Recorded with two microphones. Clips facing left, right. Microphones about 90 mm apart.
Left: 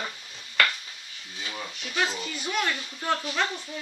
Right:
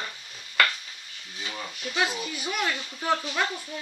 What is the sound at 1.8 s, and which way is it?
Speech, 10° right (ahead or behind).